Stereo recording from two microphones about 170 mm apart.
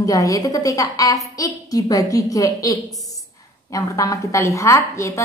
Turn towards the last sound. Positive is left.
turn(degrees=15)  # may be behind; listen again after turning